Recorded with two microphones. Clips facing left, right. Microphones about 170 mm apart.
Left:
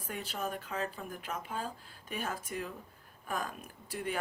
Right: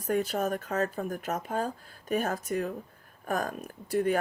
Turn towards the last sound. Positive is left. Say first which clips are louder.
# right 11 dB
turn(degrees=-45)  # may be behind; listen again after turning